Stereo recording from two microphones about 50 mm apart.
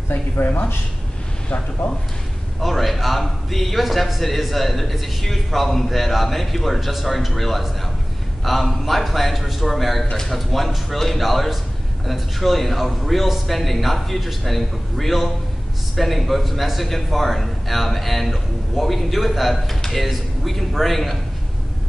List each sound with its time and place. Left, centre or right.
0.1 s a man's voice: left
2.6 s a man's voice: centre